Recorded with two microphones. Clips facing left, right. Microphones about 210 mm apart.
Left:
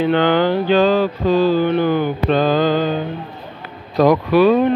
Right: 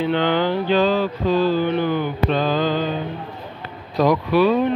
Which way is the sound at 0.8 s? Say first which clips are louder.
Left 4 dB; 90° left.